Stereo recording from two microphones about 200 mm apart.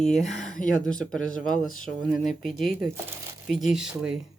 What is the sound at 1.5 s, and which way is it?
Speech, 40° left (ahead or behind).